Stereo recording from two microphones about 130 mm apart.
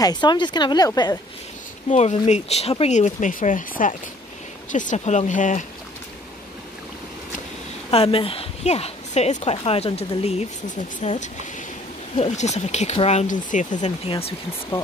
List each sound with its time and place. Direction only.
0.0 s a woman's voice: 35° left (ahead or behind)
1.9 s speech: 60° left (ahead or behind); by 3.9 s 85° left
4.7 s speech: 65° left (ahead or behind)
7.9 s a woman's voice: 50° left (ahead or behind)
11.0 s speech: 65° left (ahead or behind)